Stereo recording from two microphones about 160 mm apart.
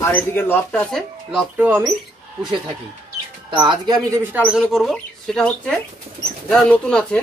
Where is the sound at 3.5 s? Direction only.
30° right (ahead or behind).